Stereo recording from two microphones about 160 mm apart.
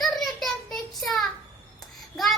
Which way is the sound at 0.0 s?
Centre (ahead or behind).